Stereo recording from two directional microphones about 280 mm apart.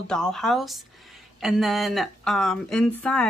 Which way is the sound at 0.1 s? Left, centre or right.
Centre.